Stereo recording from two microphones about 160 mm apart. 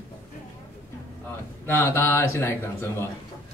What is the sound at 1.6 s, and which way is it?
A man's voice, 15° left (ahead or behind).